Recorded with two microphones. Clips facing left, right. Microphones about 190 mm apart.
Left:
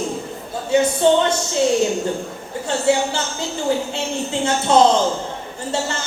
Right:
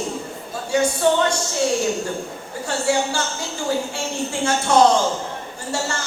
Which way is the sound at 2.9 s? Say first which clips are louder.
Left 3 dB; 20° left (ahead or behind).